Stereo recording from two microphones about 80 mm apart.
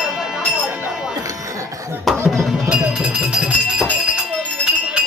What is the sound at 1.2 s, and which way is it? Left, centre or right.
Music, right.